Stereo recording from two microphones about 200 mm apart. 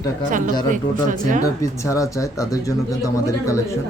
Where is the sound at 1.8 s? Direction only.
15° left (ahead or behind).